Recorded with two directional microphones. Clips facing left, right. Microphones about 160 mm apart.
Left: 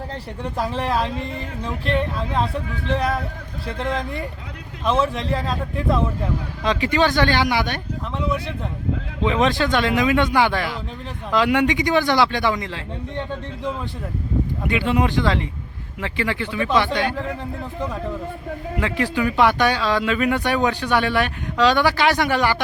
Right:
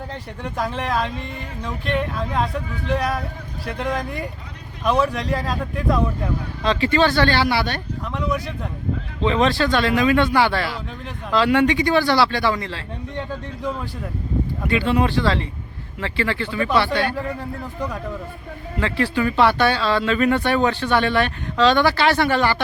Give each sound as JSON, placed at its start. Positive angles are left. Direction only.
{"t": 0.7, "sound": "a sound", "side_deg": 30}
{"t": 3.8, "sound": "speech", "side_deg": 25}
{"t": 6.6, "sound": "speech", "side_deg": 15}
{"t": 9.2, "sound": "speech", "side_deg": 15}
{"t": 14.6, "sound": "speech", "side_deg": 15}
{"t": 18.8, "sound": "speech", "side_deg": 15}